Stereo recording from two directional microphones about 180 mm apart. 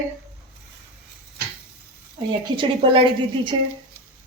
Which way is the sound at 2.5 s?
30° right (ahead or behind).